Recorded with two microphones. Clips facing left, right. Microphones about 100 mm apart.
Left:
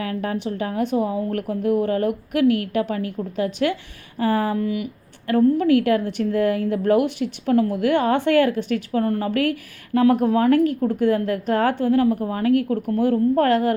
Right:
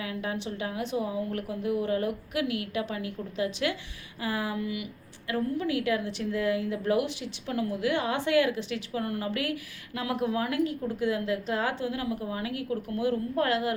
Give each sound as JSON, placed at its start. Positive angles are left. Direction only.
{"t": 0.0, "sound": "a woman's voice", "side_deg": 45}